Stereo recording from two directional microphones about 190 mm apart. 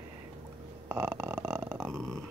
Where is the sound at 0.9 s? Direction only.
10° right (ahead or behind).